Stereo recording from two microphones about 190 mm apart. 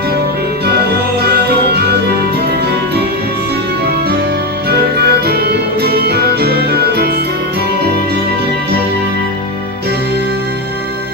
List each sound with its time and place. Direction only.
1.2 s music: 60° right (ahead or behind)
4.7 s music: 55° right (ahead or behind)